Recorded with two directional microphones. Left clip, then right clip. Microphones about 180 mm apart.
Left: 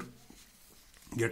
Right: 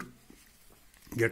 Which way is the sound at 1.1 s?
10° right (ahead or behind).